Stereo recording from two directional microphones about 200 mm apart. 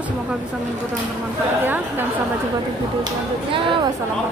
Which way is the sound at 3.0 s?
25° right (ahead or behind).